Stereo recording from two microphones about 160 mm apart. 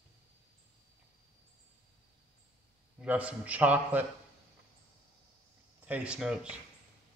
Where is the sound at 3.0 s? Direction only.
10° right (ahead or behind).